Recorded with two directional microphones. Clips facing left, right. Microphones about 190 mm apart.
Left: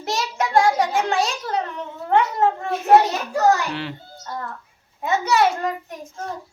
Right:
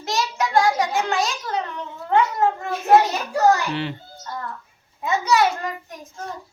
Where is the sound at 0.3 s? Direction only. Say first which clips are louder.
Left 2 dB; 25° left (ahead or behind).